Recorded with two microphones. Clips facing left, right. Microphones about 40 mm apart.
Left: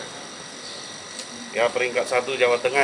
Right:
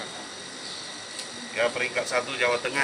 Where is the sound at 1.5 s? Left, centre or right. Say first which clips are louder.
Left 4 dB; centre.